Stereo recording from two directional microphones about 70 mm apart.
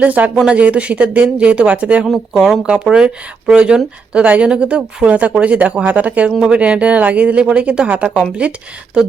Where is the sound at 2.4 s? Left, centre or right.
Centre.